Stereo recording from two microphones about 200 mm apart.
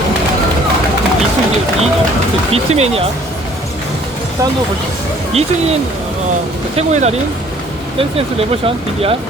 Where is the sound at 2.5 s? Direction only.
30° right (ahead or behind).